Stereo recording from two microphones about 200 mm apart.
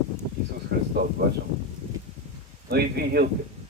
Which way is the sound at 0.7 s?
60° right (ahead or behind).